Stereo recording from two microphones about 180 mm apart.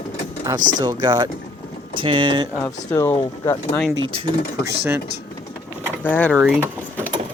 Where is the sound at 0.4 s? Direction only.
25° right (ahead or behind).